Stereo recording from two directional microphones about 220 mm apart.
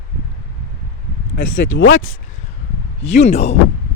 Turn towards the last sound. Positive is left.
turn(degrees=30)  # may be behind; listen again after turning